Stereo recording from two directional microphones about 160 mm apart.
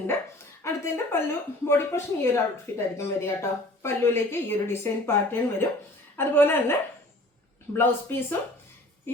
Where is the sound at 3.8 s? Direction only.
15° left (ahead or behind).